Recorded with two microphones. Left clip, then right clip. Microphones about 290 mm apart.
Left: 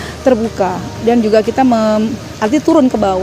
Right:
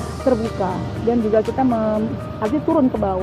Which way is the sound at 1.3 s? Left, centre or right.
Left.